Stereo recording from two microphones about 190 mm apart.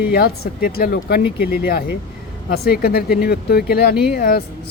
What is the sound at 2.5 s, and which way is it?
Speech, 55° left (ahead or behind).